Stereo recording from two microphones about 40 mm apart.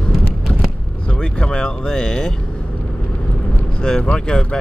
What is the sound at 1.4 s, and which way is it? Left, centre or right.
Speech, left.